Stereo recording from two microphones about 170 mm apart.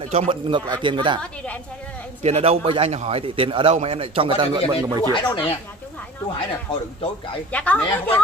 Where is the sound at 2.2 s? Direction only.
40° right (ahead or behind).